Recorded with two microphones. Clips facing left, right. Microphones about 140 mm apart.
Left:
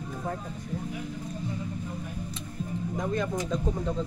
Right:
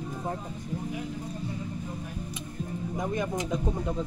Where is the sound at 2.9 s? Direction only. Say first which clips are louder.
Even; 15° right (ahead or behind).